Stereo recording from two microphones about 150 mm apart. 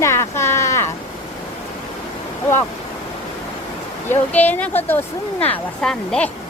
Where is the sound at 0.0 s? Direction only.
20° left (ahead or behind).